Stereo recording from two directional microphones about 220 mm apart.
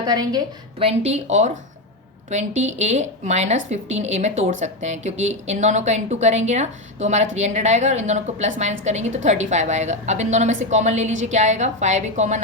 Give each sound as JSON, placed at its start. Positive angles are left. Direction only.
{"t": 0.0, "sound": "speech", "side_deg": -15}
{"t": 2.6, "sound": "a woman's voice", "side_deg": -30}